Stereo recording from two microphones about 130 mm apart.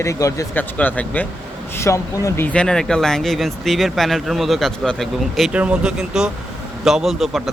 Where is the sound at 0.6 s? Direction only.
10° left (ahead or behind).